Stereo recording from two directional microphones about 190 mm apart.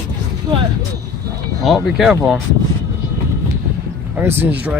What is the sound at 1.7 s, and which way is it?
Speech, centre (ahead or behind).